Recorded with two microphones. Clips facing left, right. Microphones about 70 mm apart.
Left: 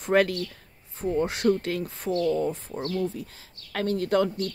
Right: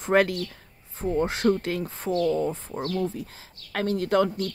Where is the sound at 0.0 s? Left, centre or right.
Right.